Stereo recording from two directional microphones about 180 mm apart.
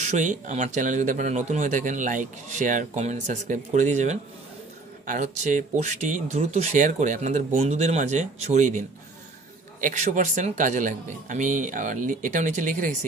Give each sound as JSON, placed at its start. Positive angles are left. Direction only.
{"t": 0.0, "sound": "a man's voice", "side_deg": -40}